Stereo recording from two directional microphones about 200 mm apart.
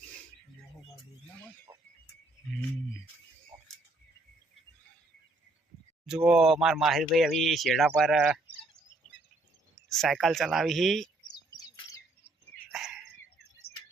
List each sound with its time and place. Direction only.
6.1 s speech: 5° right (ahead or behind)
9.9 s speech: centre (ahead or behind)
12.6 s bird: centre (ahead or behind)
13.7 s a sound: 55° left (ahead or behind)